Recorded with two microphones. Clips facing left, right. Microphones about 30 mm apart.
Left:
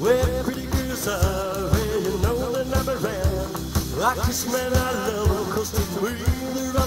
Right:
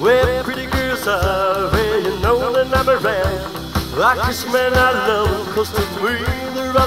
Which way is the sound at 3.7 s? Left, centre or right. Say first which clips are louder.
Right 8 dB; right.